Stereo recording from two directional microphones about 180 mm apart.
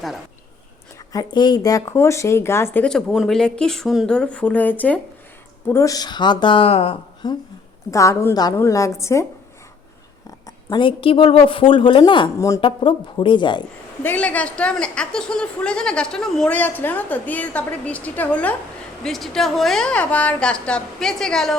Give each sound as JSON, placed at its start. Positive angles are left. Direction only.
{"t": 1.1, "sound": "a woman's voice", "side_deg": 20}
{"t": 7.9, "sound": "a woman's voice", "side_deg": 15}
{"t": 10.4, "sound": "a woman's voice", "side_deg": 25}
{"t": 14.0, "sound": "a woman's voice", "side_deg": 10}